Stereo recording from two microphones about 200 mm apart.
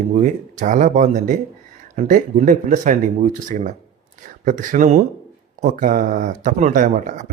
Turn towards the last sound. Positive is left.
turn(degrees=-40)  # may be behind; listen again after turning